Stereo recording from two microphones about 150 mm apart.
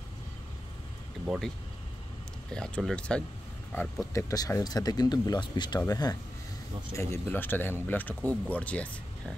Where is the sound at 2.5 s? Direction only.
5° left (ahead or behind).